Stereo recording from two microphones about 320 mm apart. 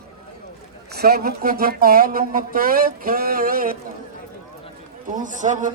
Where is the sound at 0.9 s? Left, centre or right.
Right.